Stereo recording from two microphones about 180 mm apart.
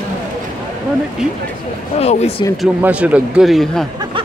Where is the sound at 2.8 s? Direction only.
5° right (ahead or behind).